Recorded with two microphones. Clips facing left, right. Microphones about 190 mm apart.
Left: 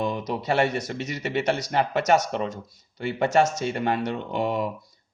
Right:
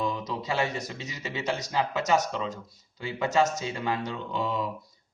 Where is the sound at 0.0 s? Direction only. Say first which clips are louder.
Left 4 dB; 70° left (ahead or behind).